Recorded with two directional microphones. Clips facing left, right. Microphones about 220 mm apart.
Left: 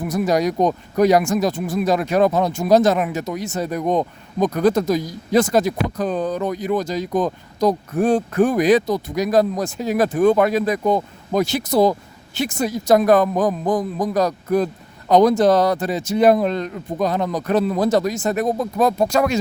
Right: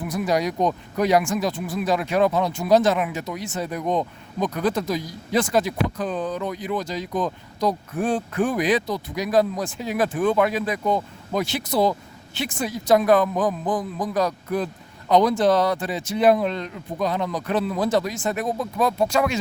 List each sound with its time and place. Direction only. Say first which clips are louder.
0.0 s speech: left 4 dB; 45° left (ahead or behind)